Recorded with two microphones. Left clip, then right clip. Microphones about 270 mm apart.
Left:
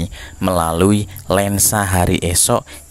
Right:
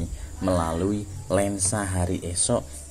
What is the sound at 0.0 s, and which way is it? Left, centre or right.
Speech, left.